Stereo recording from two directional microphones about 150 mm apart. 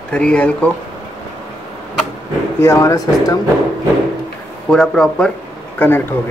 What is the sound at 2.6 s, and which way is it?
Speech, 20° left (ahead or behind).